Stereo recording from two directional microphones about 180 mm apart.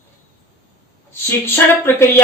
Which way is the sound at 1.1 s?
10° left (ahead or behind).